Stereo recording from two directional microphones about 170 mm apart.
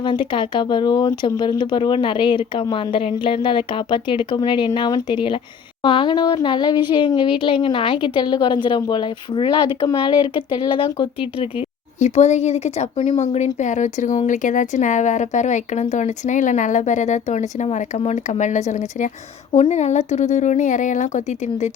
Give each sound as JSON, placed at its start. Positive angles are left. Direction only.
{"t": 0.0, "sound": "a woman's voice", "side_deg": 30}
{"t": 11.9, "sound": "speech", "side_deg": 40}